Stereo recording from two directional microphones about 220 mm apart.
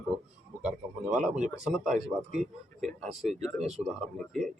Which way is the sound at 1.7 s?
Centre (ahead or behind).